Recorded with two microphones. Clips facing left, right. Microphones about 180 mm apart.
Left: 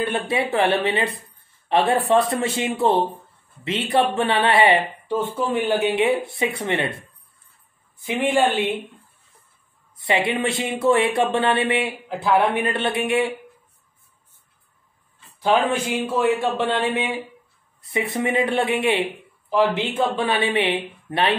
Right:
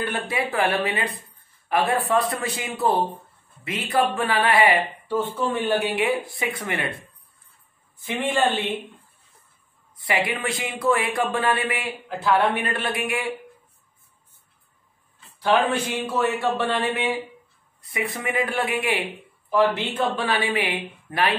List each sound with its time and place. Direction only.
0.0 s speech: 25° left (ahead or behind)
8.0 s speech: 15° left (ahead or behind)
9.9 s speech: 25° left (ahead or behind)
15.9 s speech: 20° left (ahead or behind)